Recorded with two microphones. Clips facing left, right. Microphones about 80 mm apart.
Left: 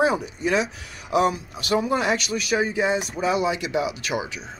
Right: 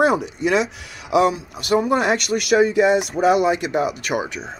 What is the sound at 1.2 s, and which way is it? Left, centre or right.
Speech, right.